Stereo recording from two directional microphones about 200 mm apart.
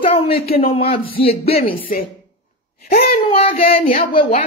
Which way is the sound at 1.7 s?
45° left (ahead or behind).